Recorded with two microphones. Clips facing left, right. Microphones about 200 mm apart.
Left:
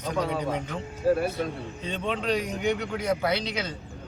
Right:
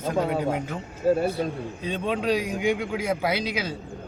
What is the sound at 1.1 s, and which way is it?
Speech, 25° right (ahead or behind).